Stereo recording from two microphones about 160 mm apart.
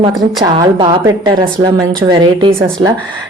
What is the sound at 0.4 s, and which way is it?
A woman's voice, 30° right (ahead or behind).